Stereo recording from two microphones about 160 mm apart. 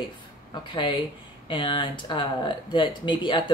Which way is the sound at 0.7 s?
30° left (ahead or behind).